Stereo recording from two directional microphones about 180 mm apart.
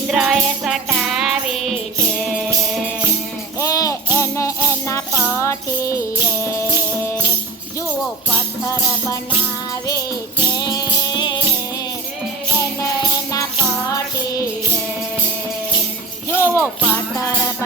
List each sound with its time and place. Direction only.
0.1 s music: 5° right (ahead or behind)
3.6 s music: 20° left (ahead or behind)
8.6 s music: 20° left (ahead or behind)
10.6 s music: 20° left (ahead or behind)
16.3 s music: 15° left (ahead or behind)